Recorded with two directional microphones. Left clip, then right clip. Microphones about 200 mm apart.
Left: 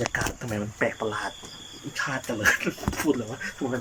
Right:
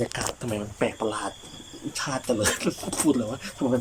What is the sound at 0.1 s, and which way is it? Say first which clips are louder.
Speech: left 1 dB; 10° right (ahead or behind).